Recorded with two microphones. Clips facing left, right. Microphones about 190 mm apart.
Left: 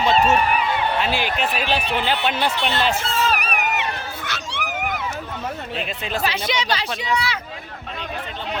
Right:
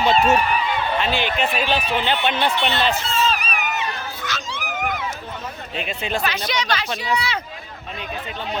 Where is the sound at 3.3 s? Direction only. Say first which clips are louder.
Left 1 dB; 65° left (ahead or behind).